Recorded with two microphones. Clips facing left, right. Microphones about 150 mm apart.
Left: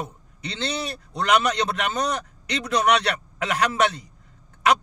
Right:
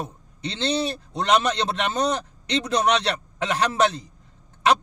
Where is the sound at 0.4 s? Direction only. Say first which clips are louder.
Right 4 dB; 25° right (ahead or behind).